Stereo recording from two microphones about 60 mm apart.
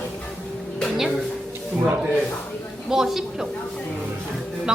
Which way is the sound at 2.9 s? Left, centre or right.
Centre.